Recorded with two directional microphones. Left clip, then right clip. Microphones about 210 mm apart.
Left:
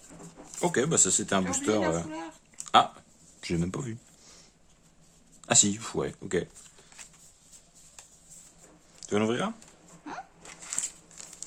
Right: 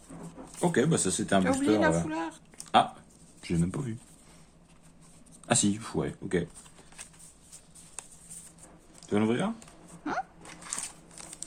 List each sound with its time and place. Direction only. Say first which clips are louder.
0.6 s speech: left 1 dB; 30° left (ahead or behind)
1.8 s a woman's voice: right 3 dB; 50° right (ahead or behind)
2.6 s a sound: left 2 dB; 35° left (ahead or behind)
3.4 s speech: left 1 dB; 35° left (ahead or behind)
5.5 s speech: left 3 dB; 25° left (ahead or behind)
9.0 s speech: left 1 dB; 35° left (ahead or behind)